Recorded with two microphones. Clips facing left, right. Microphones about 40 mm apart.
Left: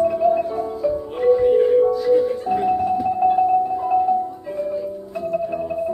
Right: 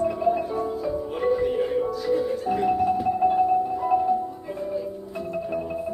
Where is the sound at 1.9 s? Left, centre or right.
Centre.